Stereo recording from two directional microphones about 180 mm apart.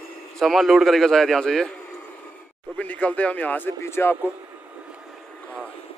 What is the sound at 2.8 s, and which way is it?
Speech, 5° left (ahead or behind).